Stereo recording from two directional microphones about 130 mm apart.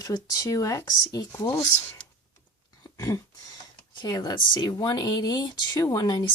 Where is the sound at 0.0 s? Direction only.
30° left (ahead or behind).